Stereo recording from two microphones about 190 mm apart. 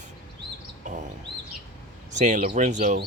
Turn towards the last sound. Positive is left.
turn(degrees=-50)  # may be behind; listen again after turning